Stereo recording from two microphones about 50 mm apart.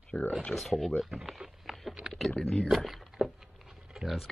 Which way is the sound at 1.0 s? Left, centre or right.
Centre.